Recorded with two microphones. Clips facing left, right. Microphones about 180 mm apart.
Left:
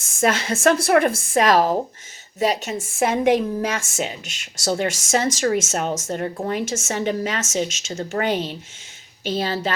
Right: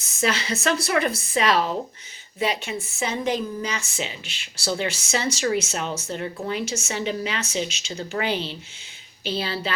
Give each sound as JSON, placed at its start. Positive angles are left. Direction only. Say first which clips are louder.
{"t": 0.0, "sound": "a woman's voice", "louder": "left 4 dB", "side_deg": 50}